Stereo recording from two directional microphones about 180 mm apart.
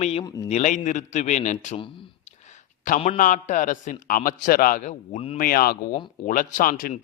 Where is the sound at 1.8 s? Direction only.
40° left (ahead or behind).